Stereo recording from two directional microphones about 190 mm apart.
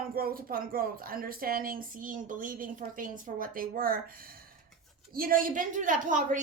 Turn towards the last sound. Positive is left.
turn(degrees=-45)  # may be behind; listen again after turning